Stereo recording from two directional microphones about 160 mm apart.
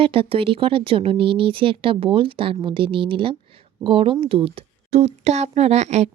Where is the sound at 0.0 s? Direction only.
35° right (ahead or behind).